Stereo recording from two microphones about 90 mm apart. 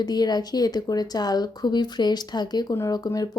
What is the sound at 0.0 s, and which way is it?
A woman's voice, 50° left (ahead or behind).